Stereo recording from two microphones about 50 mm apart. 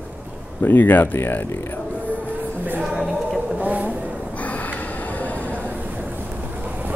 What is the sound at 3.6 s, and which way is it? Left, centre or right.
Vehicle, right.